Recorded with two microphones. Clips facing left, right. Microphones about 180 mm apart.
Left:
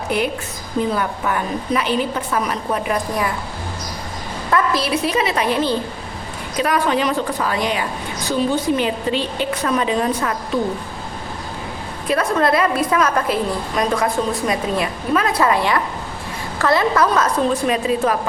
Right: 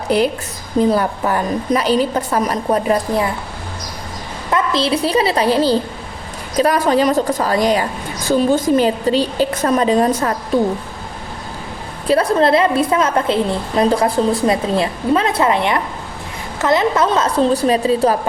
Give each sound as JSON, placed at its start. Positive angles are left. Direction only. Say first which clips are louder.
{"t": 0.1, "sound": "a woman's voice", "louder": "right 6 dB", "side_deg": -35}
{"t": 4.5, "sound": "a woman's voice", "louder": "right 2 dB", "side_deg": -25}
{"t": 12.0, "sound": "a woman's voice", "louder": "right 4 dB", "side_deg": -30}